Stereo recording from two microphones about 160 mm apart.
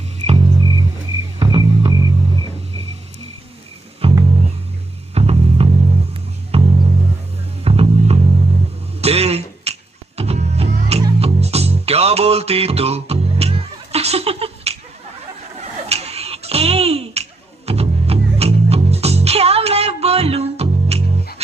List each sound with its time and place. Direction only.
0.3 s music: 40° right (ahead or behind)
4.0 s music: 35° right (ahead or behind)
9.0 s throat clearing: 40° right (ahead or behind)
10.2 s music: 40° right (ahead or behind)
15.9 s a sound: 40° right (ahead or behind)
17.7 s music: 40° right (ahead or behind)